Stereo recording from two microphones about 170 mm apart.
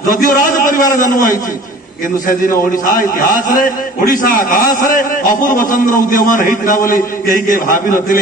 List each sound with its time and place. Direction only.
0.1 s a man's voice: 50° left (ahead or behind)
2.8 s a man's voice: 55° left (ahead or behind)